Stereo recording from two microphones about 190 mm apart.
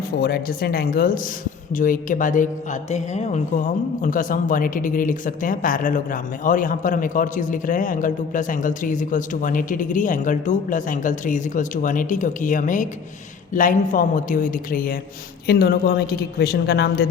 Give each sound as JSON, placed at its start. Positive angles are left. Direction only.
{"t": 0.2, "sound": "a man's voice", "side_deg": 55}